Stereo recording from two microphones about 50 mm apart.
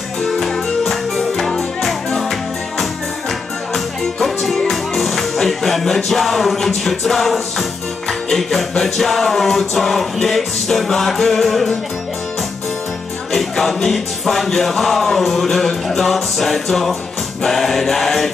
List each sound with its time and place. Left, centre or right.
0.2 s music: centre
3.7 s music: centre
13.3 s music: centre
17.4 s choir: centre